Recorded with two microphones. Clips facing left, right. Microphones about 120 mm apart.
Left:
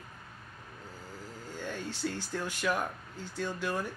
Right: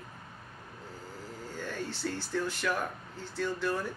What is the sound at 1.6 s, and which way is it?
Speech, 15° left (ahead or behind).